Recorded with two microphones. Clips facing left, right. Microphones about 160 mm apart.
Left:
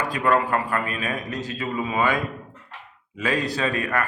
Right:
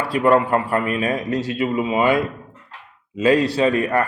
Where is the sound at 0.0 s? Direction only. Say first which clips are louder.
Right 5 dB; 30° right (ahead or behind).